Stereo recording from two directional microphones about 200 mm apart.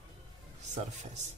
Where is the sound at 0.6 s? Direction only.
35° right (ahead or behind).